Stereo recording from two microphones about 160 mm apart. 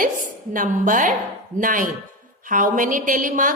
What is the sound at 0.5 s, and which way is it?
A woman's voice, 55° right (ahead or behind).